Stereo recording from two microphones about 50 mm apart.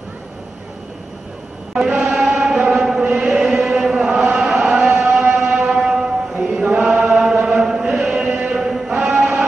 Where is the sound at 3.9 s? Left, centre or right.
Centre.